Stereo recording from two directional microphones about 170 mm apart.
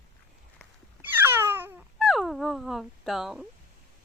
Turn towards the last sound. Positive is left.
turn(degrees=0)  # may be behind; listen again after turning